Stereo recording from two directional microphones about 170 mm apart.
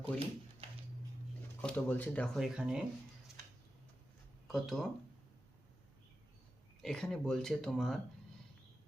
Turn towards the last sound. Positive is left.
turn(degrees=0)  # may be behind; listen again after turning